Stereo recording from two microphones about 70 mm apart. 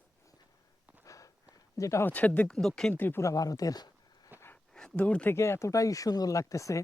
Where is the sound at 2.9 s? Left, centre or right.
Left.